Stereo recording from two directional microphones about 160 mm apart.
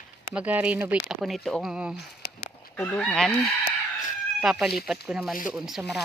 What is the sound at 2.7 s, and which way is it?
Speech, 10° left (ahead or behind).